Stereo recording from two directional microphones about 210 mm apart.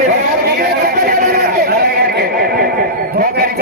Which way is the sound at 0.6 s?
45° right (ahead or behind).